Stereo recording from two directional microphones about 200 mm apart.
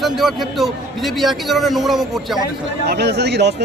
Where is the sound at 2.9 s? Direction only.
55° right (ahead or behind).